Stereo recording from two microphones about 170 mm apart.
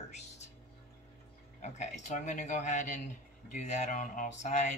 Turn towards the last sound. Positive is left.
turn(degrees=45)  # may be behind; listen again after turning